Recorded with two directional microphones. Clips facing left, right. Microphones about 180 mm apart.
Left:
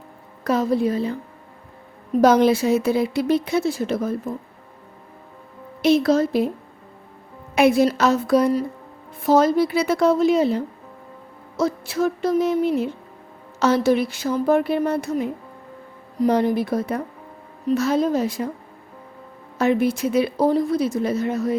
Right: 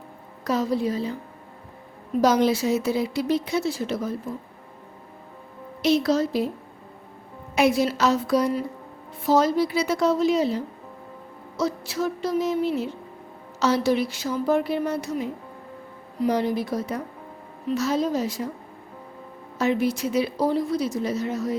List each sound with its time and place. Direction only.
0.4 s a woman's voice: 55° left (ahead or behind)
2.2 s a woman's voice: 55° left (ahead or behind)
5.8 s a woman's voice: 55° left (ahead or behind)
7.5 s a woman's voice: 55° left (ahead or behind)
19.5 s a woman's voice: 55° left (ahead or behind)